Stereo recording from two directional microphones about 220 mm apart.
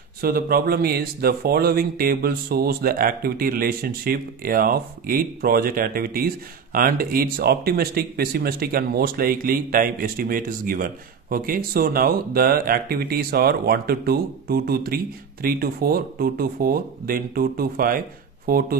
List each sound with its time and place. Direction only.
0.2 s speech: 45° right (ahead or behind)